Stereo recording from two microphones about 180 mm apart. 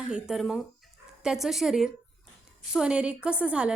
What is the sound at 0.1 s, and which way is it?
A woman's voice, centre (ahead or behind).